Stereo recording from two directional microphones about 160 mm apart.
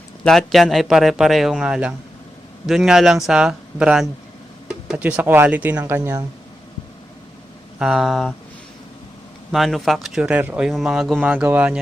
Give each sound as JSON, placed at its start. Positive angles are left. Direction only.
{"t": 0.3, "sound": "speech", "side_deg": 0}
{"t": 7.8, "sound": "speech", "side_deg": -5}
{"t": 9.5, "sound": "speech", "side_deg": 0}